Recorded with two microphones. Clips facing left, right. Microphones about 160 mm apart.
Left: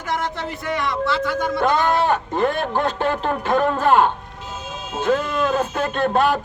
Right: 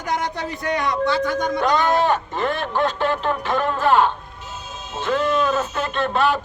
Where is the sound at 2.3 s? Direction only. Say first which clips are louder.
Left 3 dB; 45° left (ahead or behind).